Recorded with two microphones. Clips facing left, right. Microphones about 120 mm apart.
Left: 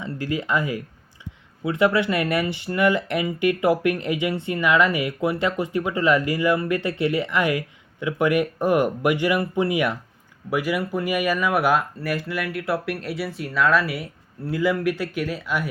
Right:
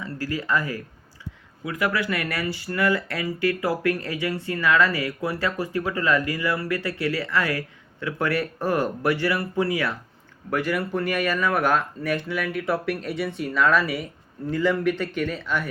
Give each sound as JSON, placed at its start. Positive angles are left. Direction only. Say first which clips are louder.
{"t": 0.0, "sound": "speech", "louder": "left 2 dB", "side_deg": 20}